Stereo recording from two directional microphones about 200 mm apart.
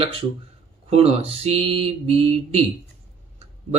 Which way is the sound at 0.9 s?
30° right (ahead or behind).